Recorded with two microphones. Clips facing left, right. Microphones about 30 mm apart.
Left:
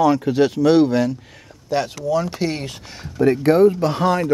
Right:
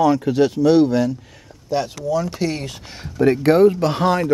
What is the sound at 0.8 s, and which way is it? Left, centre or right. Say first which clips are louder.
Speech: even; left.